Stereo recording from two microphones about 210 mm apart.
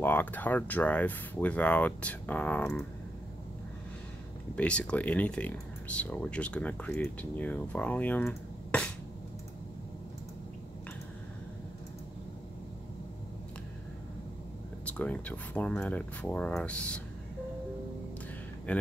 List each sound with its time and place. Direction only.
0.0 s speech: 10° left (ahead or behind)
4.6 s speech: 5° left (ahead or behind)
14.9 s speech: 5° left (ahead or behind)
18.7 s speech: 5° left (ahead or behind)